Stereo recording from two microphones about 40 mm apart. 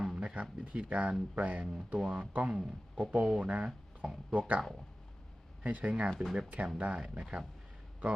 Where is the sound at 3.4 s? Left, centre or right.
Right.